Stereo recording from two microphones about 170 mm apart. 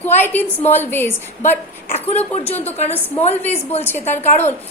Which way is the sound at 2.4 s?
10° left (ahead or behind).